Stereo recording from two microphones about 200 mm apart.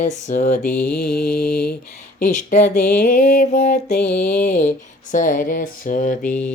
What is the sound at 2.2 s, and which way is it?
Mantra, 40° left (ahead or behind).